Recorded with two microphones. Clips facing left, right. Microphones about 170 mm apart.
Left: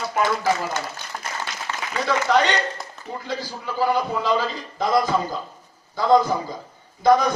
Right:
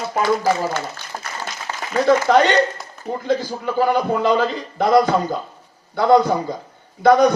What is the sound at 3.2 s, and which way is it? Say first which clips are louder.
A man's voice: right 10 dB; 55° right (ahead or behind).